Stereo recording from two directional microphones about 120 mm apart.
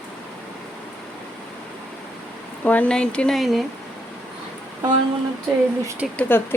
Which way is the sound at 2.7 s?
10° left (ahead or behind).